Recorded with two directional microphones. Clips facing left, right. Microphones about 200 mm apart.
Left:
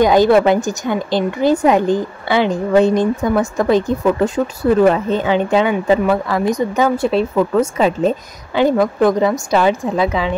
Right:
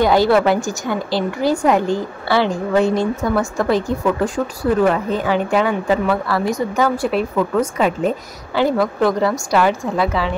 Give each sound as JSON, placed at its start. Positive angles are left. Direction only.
{"t": 0.0, "sound": "a woman's voice", "side_deg": 20}